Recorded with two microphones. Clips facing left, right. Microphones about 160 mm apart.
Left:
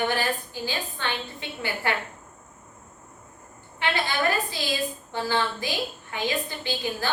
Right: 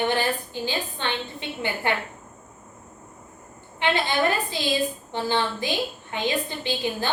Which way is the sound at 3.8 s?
20° right (ahead or behind).